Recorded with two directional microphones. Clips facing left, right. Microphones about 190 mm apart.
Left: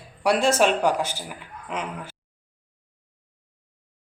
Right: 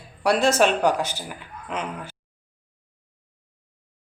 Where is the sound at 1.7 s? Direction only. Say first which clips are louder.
Right 1 dB; 10° left (ahead or behind).